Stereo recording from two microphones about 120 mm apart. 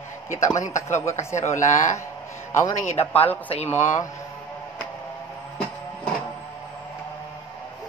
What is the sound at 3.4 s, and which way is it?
Speech, 65° left (ahead or behind).